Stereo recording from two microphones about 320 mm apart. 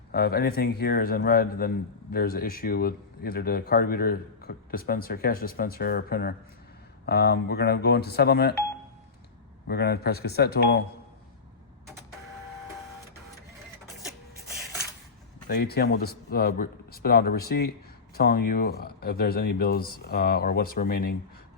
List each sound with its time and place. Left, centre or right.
0.1 s speech: left
9.6 s speech: left
15.4 s speech: left